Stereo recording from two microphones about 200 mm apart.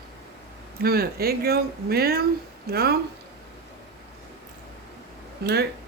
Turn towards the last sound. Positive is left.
turn(degrees=-55)  # may be behind; listen again after turning